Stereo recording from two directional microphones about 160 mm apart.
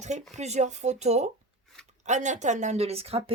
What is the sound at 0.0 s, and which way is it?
Speech, 45° right (ahead or behind).